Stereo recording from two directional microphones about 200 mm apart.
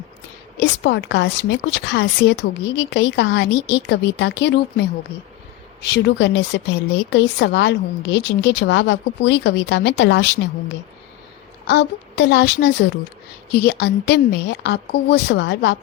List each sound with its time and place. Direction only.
0.5 s a woman's voice: 60° left (ahead or behind)
11.6 s a woman's voice: 60° left (ahead or behind)